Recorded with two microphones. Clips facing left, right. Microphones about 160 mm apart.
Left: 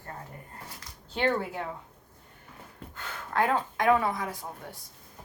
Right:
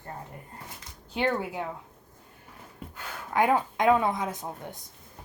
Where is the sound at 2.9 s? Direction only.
15° right (ahead or behind).